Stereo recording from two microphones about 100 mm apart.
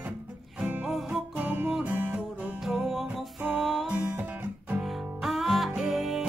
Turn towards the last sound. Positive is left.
turn(degrees=0)  # may be behind; listen again after turning